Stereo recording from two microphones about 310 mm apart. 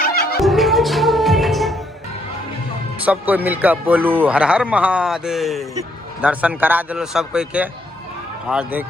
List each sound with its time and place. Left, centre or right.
0.0 s music: left
0.4 s music: centre
3.0 s a man's voice: centre